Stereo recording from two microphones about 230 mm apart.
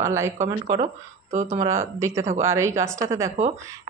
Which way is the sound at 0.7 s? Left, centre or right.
Right.